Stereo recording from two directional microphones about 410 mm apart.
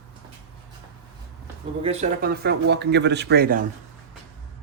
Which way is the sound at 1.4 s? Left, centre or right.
Centre.